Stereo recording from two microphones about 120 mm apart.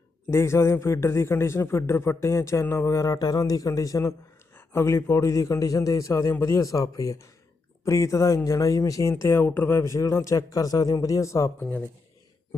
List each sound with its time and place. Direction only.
0.3 s a man's voice: 20° left (ahead or behind)
11.6 s speech: 15° left (ahead or behind)